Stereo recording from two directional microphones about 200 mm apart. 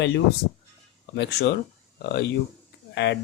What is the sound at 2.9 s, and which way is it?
Speech, 60° left (ahead or behind).